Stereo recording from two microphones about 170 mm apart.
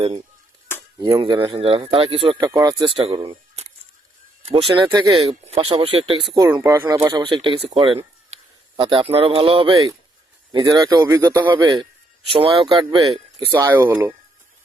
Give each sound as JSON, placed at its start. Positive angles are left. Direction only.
{"t": 0.7, "sound": "a sound", "side_deg": 15}
{"t": 1.0, "sound": "speech", "side_deg": -25}
{"t": 2.9, "sound": "speech", "side_deg": -30}
{"t": 4.9, "sound": "speech", "side_deg": -20}
{"t": 5.1, "sound": "speech", "side_deg": -35}
{"t": 6.3, "sound": "speech", "side_deg": -20}
{"t": 7.1, "sound": "speech", "side_deg": -25}
{"t": 12.3, "sound": "speech", "side_deg": -35}
{"t": 13.5, "sound": "speech", "side_deg": -15}